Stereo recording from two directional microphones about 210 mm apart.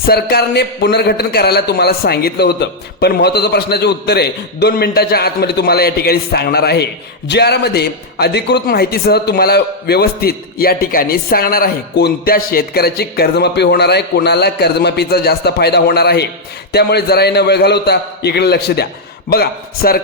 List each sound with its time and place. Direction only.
0.0 s a man's voice: 50° left (ahead or behind)